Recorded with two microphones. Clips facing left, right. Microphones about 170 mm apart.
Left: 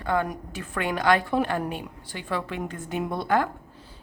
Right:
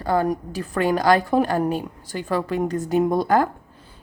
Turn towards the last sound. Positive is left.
turn(degrees=-40)  # may be behind; listen again after turning